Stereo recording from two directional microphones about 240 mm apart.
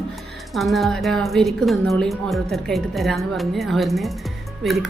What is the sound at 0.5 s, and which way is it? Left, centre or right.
Speech, centre.